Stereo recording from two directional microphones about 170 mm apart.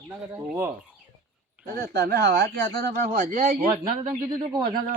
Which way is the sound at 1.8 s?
70° right (ahead or behind).